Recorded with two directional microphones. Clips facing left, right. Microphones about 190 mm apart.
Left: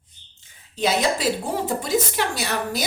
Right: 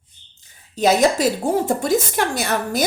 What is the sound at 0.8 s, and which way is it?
A woman's voice, 45° right (ahead or behind).